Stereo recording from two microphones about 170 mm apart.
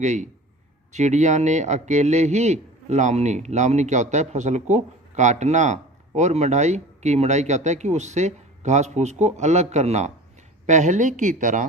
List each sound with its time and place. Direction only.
0.0 s a man's voice: 45° right (ahead or behind)